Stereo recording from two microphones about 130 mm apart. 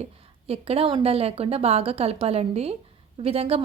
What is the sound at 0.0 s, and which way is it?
A woman's voice, 50° right (ahead or behind).